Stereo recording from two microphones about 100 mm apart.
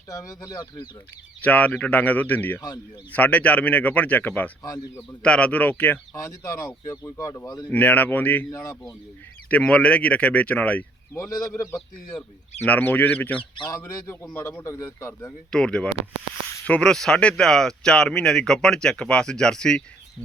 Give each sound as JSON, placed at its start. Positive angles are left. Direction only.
{"t": 0.1, "sound": "speech", "side_deg": 35}
{"t": 1.4, "sound": "speech", "side_deg": 15}
{"t": 2.6, "sound": "speech", "side_deg": 40}
{"t": 3.1, "sound": "speech", "side_deg": 15}
{"t": 6.1, "sound": "speech", "side_deg": 30}
{"t": 7.7, "sound": "speech", "side_deg": 15}
{"t": 8.4, "sound": "speech", "side_deg": 35}
{"t": 9.5, "sound": "speech", "side_deg": 10}
{"t": 11.1, "sound": "speech", "side_deg": 35}
{"t": 11.7, "sound": "speech", "side_deg": 10}
{"t": 13.7, "sound": "a man's voice", "side_deg": 35}
{"t": 15.3, "sound": "speech", "side_deg": 10}